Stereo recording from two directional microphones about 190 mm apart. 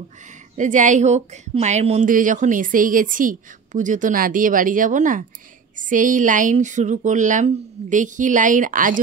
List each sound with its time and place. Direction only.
0.6 s a woman's voice: 40° right (ahead or behind)